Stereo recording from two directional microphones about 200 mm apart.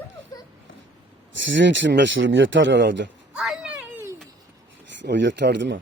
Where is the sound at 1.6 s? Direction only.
65° right (ahead or behind).